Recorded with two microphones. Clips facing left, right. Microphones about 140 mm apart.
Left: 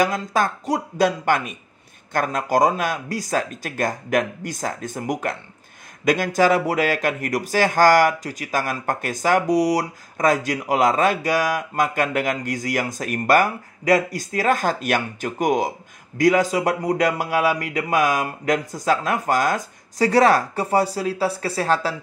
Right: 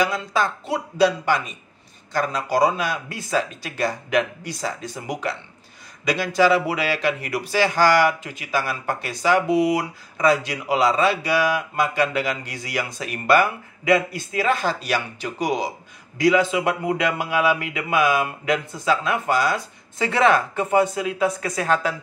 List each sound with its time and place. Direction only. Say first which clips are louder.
0.0 s speech: left 2 dB; 45° left (ahead or behind)